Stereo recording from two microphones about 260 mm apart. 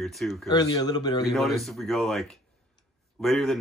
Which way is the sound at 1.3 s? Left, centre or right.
Centre.